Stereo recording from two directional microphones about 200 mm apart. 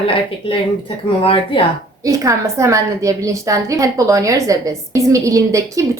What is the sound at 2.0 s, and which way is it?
A woman's voice, 15° right (ahead or behind).